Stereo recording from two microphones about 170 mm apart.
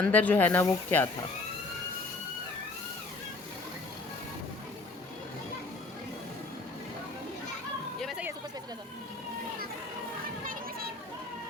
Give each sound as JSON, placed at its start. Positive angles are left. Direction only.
{"t": 0.0, "sound": "speech", "side_deg": 10}
{"t": 7.9, "sound": "a sound", "side_deg": 0}
{"t": 10.4, "sound": "children playing", "side_deg": -55}